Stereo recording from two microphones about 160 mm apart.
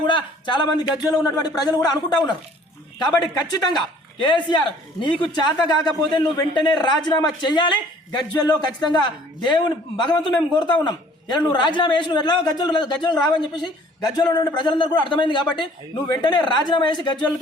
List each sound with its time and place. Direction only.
0.0 s a man's voice: 30° left (ahead or behind)
3.3 s a man's voice: 25° left (ahead or behind)